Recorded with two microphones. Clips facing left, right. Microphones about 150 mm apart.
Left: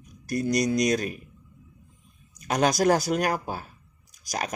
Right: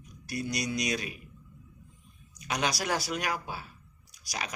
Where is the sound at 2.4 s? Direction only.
45° left (ahead or behind).